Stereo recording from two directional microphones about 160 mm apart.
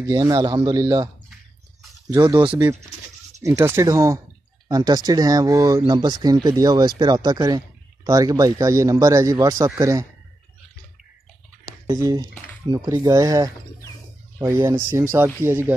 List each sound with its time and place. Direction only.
0.0 s speech: 20° right (ahead or behind)
3.4 s speech: 15° right (ahead or behind)
11.8 s speech: 20° right (ahead or behind)